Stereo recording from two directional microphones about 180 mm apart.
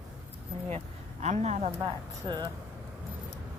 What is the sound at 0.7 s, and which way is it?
Speech, 40° right (ahead or behind).